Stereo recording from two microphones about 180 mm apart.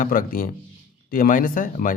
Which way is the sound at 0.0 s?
50° left (ahead or behind).